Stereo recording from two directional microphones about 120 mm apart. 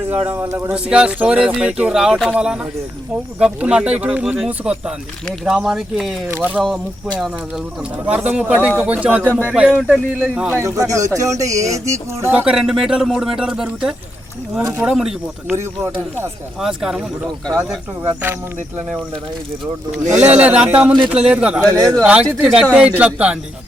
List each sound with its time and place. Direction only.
0.1 s speech: 15° right (ahead or behind)
0.4 s speech: 25° right (ahead or behind)
0.7 s speech: 10° right (ahead or behind)
6.2 s speech: 20° right (ahead or behind)
8.0 s speech: 10° right (ahead or behind)
10.6 s speech: 25° right (ahead or behind)
12.3 s speech: 15° right (ahead or behind)
12.5 s speech: 5° right (ahead or behind)
15.5 s speech: 20° right (ahead or behind)
16.6 s speech: 5° right (ahead or behind)
18.0 s speech: 20° right (ahead or behind)
20.1 s speech: 10° right (ahead or behind)
21.7 s speech: 30° right (ahead or behind)
22.0 s speech: 10° right (ahead or behind)